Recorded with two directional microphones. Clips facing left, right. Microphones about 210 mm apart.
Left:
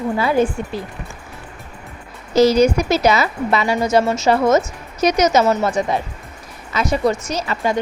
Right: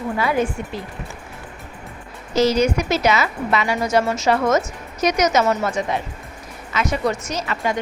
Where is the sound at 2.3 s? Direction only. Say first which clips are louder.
Left 4 dB; 35° left (ahead or behind).